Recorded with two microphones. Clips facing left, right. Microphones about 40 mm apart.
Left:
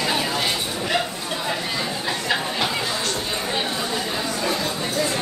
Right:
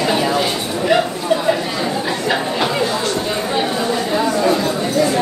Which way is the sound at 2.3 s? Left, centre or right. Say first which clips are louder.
Right 5 dB; centre.